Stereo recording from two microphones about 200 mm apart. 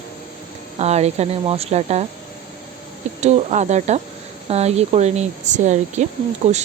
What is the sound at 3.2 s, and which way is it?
Speech, 35° right (ahead or behind).